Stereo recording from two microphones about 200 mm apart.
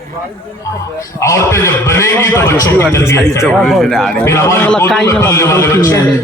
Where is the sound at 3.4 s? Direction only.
Centre (ahead or behind).